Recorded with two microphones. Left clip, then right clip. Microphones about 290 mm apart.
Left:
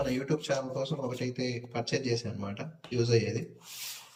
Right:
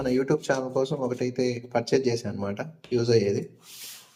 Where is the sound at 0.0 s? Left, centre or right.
Centre.